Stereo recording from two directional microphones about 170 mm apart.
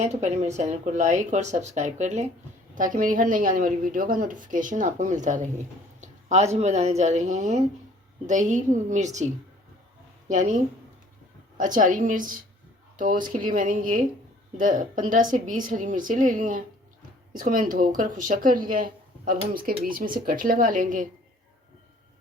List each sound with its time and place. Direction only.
0.0 s a woman's voice: 40° right (ahead or behind)